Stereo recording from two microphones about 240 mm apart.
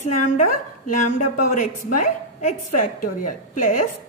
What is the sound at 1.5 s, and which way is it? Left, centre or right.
A woman's voice, left.